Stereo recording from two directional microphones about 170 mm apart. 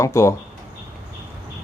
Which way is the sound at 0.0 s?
15° left (ahead or behind).